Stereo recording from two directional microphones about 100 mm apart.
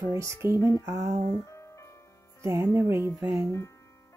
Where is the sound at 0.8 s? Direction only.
30° right (ahead or behind).